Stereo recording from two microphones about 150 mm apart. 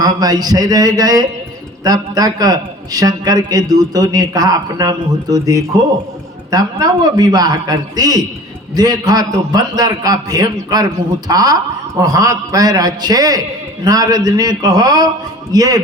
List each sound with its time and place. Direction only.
0.0 s a man's voice: 25° right (ahead or behind)